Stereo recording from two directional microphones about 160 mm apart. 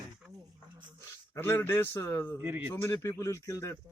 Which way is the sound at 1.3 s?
15° left (ahead or behind).